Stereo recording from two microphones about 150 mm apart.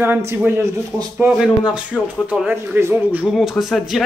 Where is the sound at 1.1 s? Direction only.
5° right (ahead or behind).